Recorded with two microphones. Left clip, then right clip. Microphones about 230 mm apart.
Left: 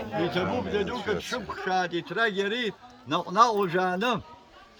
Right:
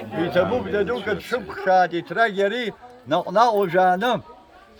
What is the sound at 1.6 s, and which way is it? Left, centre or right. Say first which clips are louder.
A man's voice: right 10 dB; right.